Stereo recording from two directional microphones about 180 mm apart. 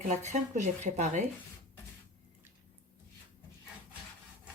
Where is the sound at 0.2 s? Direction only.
40° right (ahead or behind).